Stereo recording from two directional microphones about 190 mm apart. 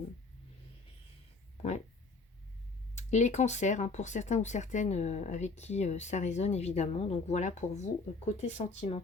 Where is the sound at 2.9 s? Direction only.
35° left (ahead or behind).